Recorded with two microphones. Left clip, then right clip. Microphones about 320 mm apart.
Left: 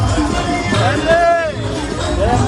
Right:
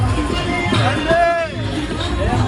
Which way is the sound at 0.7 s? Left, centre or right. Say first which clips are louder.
Left 4 dB; left.